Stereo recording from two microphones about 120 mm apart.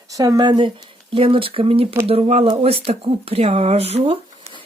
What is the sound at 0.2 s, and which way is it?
Speech, 30° right (ahead or behind).